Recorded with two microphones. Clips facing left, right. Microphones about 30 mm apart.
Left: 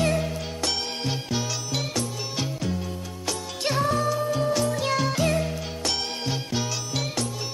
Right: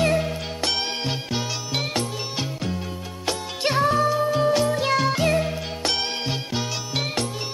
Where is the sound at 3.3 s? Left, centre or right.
Right.